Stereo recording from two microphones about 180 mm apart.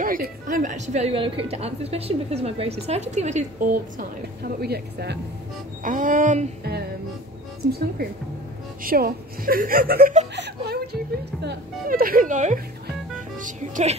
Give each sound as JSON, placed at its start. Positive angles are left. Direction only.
{"t": 0.0, "sound": "a woman's voice", "side_deg": -50}
{"t": 4.4, "sound": "a woman's voice", "side_deg": -60}
{"t": 5.8, "sound": "a woman's voice", "side_deg": -45}
{"t": 8.8, "sound": "a woman's voice", "side_deg": -55}
{"t": 10.3, "sound": "a sound", "side_deg": -65}
{"t": 11.4, "sound": "a woman's voice", "side_deg": -55}